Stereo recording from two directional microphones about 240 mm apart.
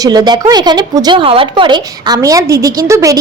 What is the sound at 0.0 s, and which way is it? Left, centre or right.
A woman's voice, centre.